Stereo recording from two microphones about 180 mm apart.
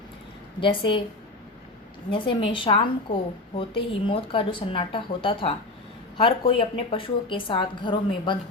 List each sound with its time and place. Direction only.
0.6 s a woman's voice: 30° left (ahead or behind)
2.0 s a woman's voice: 30° left (ahead or behind)